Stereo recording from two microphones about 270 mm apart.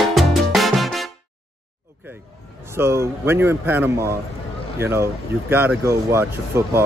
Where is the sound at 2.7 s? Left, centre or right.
Centre.